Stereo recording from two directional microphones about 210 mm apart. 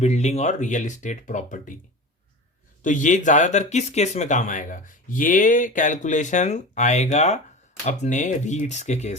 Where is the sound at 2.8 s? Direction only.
35° left (ahead or behind).